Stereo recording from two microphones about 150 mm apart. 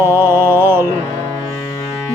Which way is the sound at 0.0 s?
15° right (ahead or behind).